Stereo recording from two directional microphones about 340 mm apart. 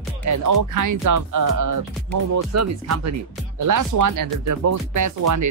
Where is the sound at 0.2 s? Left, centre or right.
Right.